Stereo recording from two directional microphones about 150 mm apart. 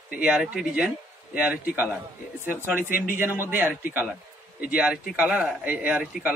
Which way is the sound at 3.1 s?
15° right (ahead or behind).